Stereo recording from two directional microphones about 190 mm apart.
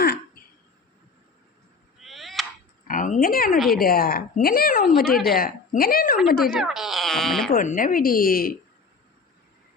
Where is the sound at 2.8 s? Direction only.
45° left (ahead or behind).